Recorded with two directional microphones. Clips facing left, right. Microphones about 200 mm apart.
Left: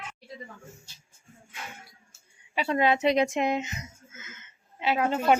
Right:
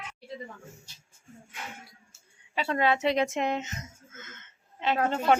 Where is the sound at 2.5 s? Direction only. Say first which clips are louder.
Left 2 dB; 15° left (ahead or behind).